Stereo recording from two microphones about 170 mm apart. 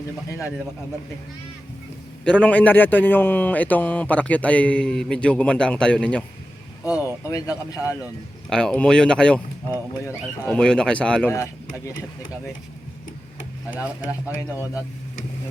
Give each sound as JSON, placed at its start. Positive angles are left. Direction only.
{"t": 0.3, "sound": "a man's voice", "side_deg": 15}
{"t": 2.2, "sound": "a man's voice", "side_deg": 5}
{"t": 6.8, "sound": "vehicle", "side_deg": -10}
{"t": 7.3, "sound": "speech", "side_deg": 20}
{"t": 8.4, "sound": "speech", "side_deg": 5}
{"t": 10.0, "sound": "a man's voice", "side_deg": 15}
{"t": 10.5, "sound": "speech", "side_deg": 5}
{"t": 13.8, "sound": "speech", "side_deg": -10}